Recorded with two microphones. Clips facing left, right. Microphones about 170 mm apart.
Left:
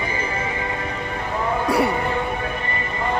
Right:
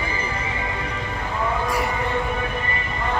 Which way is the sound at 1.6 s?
65° left (ahead or behind).